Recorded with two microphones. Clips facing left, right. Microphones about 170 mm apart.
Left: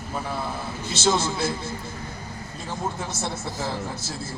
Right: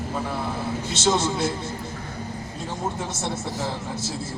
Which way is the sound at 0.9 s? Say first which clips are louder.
Even; 20° right (ahead or behind).